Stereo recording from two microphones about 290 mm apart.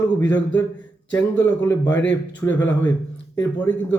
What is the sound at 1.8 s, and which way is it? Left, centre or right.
Speech, left.